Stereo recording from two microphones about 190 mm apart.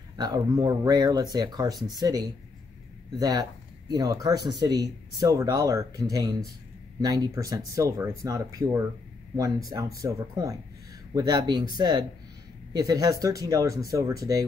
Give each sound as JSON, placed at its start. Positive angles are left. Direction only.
{"t": 0.2, "sound": "speech", "side_deg": -20}